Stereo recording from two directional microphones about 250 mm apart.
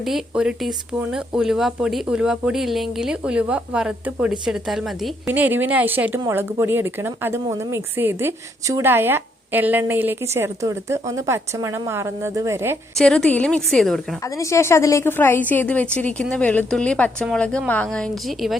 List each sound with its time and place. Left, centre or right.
0.0 s a woman's voice: centre
13.0 s a woman's voice: centre